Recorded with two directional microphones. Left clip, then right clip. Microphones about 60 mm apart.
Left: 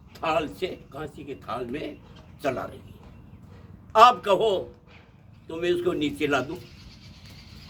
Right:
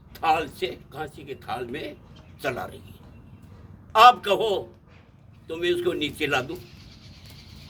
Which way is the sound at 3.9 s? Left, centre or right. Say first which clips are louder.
Right 1 dB; left.